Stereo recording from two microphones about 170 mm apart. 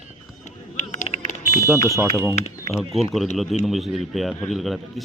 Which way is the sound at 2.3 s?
40° left (ahead or behind).